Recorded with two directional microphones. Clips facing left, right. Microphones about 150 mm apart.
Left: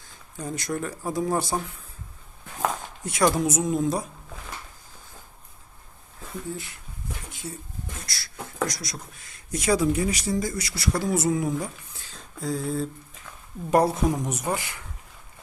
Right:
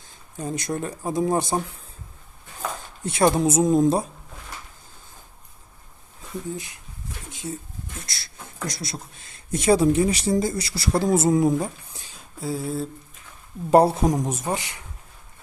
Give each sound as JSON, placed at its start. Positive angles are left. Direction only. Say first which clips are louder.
{"t": 0.1, "sound": "speech", "louder": "right 3 dB", "side_deg": -20}
{"t": 3.0, "sound": "speech", "louder": "right 3 dB", "side_deg": -30}
{"t": 7.3, "sound": "pigeon", "louder": "right 8 dB", "side_deg": -20}
{"t": 8.0, "sound": "speech", "louder": "left 3 dB", "side_deg": -25}
{"t": 11.9, "sound": "a sound", "louder": "even", "side_deg": -15}
{"t": 13.7, "sound": "speech", "louder": "right 4 dB", "side_deg": -30}